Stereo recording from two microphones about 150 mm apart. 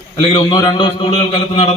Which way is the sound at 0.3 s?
35° left (ahead or behind).